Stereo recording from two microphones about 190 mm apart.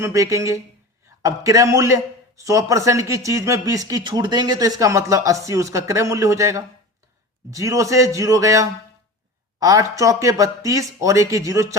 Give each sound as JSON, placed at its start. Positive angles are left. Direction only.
{"t": 0.0, "sound": "a man's voice", "side_deg": -15}